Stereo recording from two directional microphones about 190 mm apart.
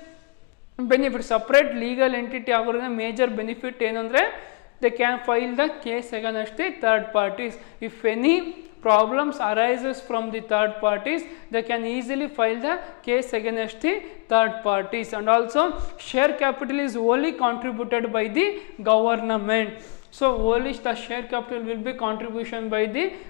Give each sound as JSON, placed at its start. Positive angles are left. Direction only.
{"t": 0.7, "sound": "a man's voice", "side_deg": 15}